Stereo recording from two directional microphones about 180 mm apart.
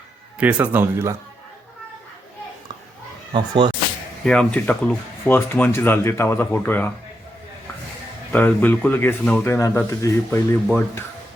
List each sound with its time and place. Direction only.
0.3 s speech: 10° right (ahead or behind)
3.3 s speech: 25° right (ahead or behind)
4.2 s speech: 5° left (ahead or behind)
8.3 s speech: 10° left (ahead or behind)